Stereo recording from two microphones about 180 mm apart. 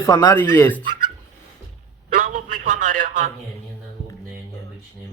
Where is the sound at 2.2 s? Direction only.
45° right (ahead or behind).